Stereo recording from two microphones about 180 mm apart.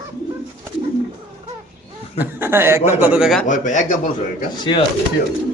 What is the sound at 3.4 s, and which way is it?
Speech, 45° left (ahead or behind).